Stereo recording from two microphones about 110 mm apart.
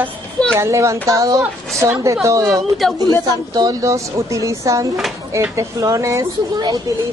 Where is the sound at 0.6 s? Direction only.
25° right (ahead or behind).